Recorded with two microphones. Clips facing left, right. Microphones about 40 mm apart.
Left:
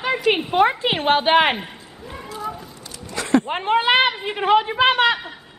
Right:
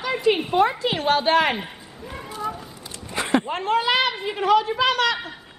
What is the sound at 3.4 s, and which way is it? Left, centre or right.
A woman's voice, left.